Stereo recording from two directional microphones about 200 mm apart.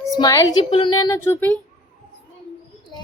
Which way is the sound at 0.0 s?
15° left (ahead or behind).